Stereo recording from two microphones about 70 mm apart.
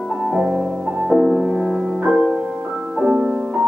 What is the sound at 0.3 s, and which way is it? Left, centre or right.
Music, centre.